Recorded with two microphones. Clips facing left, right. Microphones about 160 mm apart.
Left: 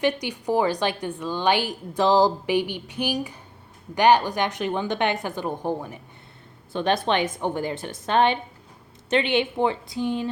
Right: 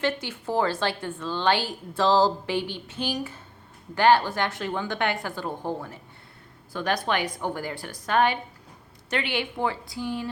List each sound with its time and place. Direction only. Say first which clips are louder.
0.0 s a woman's voice: left 4 dB; 15° left (ahead or behind)